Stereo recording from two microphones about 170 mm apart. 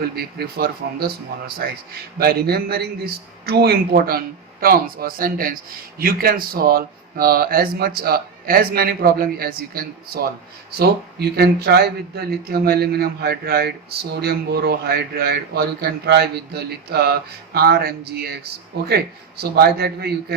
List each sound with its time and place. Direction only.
0.0 s speech: 65° right (ahead or behind)